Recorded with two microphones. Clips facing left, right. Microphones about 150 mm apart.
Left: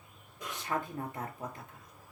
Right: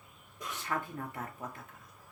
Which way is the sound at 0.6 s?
25° left (ahead or behind).